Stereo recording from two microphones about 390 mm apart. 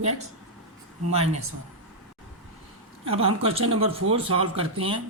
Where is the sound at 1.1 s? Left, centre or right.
Centre.